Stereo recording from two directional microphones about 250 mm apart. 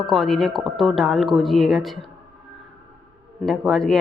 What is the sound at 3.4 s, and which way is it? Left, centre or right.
Speech, centre.